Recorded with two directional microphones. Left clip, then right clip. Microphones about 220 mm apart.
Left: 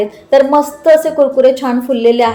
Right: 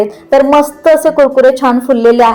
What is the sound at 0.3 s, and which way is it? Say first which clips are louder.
Speech: right 2 dB; 15° right (ahead or behind).